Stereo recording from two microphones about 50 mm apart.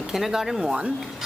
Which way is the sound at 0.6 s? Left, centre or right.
Centre.